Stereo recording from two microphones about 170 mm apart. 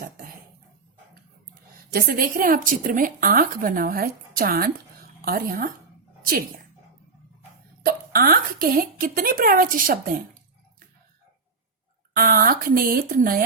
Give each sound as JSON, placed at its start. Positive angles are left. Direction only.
{"t": 1.9, "sound": "speech", "side_deg": -65}
{"t": 7.9, "sound": "speech", "side_deg": -60}
{"t": 12.1, "sound": "speech", "side_deg": -60}